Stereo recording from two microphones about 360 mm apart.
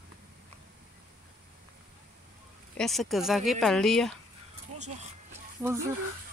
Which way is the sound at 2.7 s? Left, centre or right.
Centre.